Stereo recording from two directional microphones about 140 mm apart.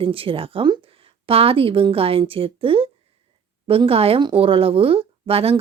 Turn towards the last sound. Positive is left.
turn(degrees=-45)  # may be behind; listen again after turning